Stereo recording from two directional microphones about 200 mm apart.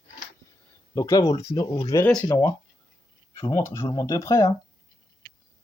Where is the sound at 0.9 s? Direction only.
15° left (ahead or behind).